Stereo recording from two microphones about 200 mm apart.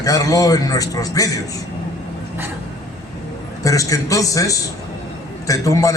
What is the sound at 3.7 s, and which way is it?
Speech, 15° left (ahead or behind).